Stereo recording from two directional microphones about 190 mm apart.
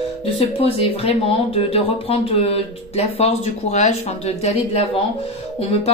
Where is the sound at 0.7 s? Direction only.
30° left (ahead or behind).